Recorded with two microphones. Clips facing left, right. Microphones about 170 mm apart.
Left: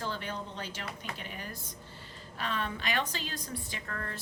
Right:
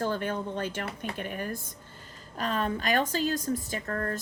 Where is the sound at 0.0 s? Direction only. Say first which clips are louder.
Right 8 dB; 50° right (ahead or behind).